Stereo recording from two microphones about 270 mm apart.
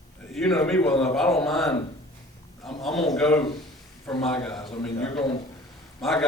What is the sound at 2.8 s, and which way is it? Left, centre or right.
Speech, centre.